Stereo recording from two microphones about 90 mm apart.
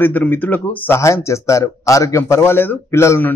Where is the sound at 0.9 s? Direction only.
30° left (ahead or behind).